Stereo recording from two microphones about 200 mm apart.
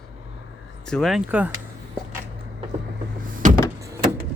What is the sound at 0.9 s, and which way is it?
Speech, centre (ahead or behind).